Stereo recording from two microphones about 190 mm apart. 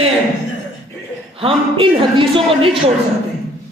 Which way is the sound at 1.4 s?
30° right (ahead or behind).